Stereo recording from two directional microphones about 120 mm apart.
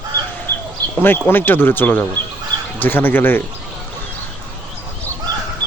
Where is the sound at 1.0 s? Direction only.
15° left (ahead or behind).